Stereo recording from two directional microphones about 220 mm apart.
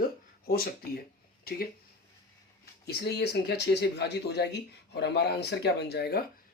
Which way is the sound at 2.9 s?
50° left (ahead or behind).